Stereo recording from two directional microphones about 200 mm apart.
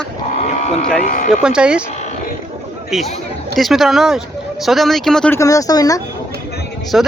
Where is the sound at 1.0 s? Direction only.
40° left (ahead or behind).